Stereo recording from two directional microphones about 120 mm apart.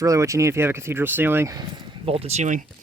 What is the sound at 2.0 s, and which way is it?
Speech, 55° right (ahead or behind).